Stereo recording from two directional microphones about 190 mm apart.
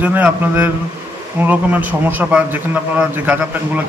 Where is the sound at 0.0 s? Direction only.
10° right (ahead or behind).